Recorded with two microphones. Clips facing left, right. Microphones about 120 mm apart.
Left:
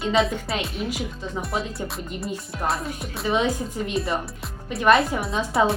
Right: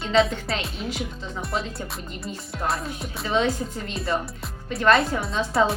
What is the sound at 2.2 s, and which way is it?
Speech, centre (ahead or behind).